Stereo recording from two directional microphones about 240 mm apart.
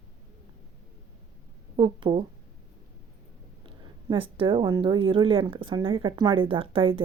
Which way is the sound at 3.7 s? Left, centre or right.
Right.